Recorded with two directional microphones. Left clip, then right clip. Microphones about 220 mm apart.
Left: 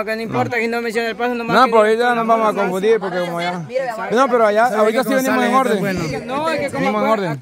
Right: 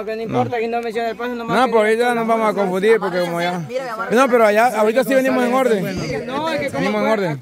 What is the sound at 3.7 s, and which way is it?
Speech, 55° right (ahead or behind).